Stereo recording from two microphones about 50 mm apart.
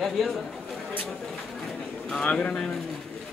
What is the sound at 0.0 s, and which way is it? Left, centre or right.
Speech, centre.